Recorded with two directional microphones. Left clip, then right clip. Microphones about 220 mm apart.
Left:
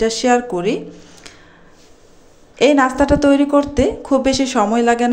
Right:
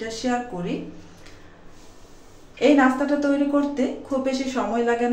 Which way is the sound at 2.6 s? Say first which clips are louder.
Left 5 dB; 45° left (ahead or behind).